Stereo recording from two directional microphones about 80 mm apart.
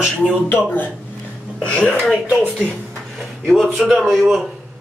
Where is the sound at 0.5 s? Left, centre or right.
Left.